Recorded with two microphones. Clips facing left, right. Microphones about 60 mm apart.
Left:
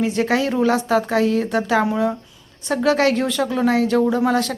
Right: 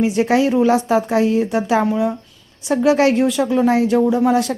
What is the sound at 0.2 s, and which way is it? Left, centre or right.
Speech, right.